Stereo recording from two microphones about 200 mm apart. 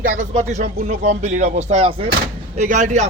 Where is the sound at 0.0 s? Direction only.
40° right (ahead or behind).